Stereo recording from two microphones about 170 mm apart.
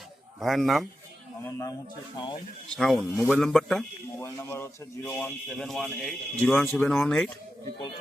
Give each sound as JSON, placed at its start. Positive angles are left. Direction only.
{"t": 0.3, "sound": "speech", "side_deg": 0}
{"t": 1.5, "sound": "a man's voice", "side_deg": 15}
{"t": 2.1, "sound": "speech", "side_deg": 30}
{"t": 2.7, "sound": "speech", "side_deg": 0}
{"t": 4.2, "sound": "speech", "side_deg": 15}